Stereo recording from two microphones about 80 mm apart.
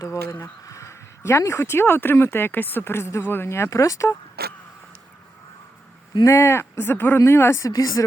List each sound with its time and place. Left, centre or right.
0.0 s speech: left
6.2 s speech: left
7.7 s speech: left